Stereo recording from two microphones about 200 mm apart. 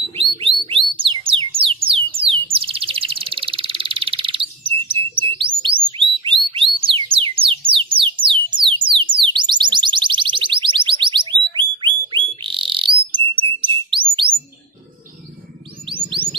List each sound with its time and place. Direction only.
0.2 s bird: 25° right (ahead or behind)
5.9 s music: 25° right (ahead or behind)
8.5 s alarm: 25° right (ahead or behind)
16.1 s music: 25° right (ahead or behind)